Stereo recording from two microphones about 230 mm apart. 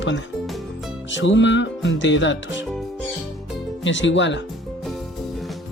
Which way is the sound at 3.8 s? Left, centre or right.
Left.